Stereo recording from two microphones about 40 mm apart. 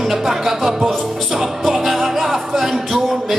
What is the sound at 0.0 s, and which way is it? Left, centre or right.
Music, centre.